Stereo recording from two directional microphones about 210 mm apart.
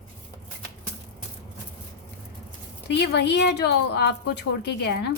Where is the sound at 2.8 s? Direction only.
50° left (ahead or behind).